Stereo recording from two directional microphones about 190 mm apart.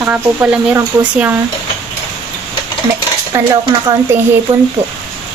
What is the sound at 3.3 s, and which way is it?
Speech, 15° right (ahead or behind).